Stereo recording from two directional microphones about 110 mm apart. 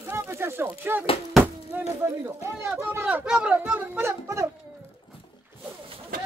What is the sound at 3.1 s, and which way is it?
Speech, 10° right (ahead or behind).